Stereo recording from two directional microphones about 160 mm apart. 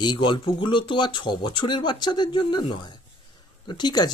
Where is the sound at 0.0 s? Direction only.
30° left (ahead or behind).